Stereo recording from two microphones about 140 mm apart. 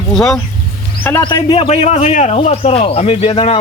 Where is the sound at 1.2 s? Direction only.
35° left (ahead or behind).